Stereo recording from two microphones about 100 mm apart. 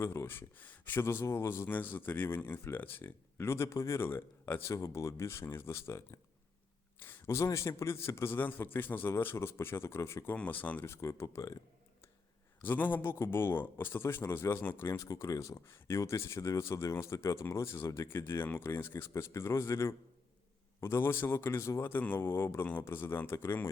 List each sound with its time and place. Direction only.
0.0 s speech: 25° left (ahead or behind)
10.3 s speech: 15° left (ahead or behind); by 11.5 s 30° left (ahead or behind)
12.6 s speech: 20° left (ahead or behind)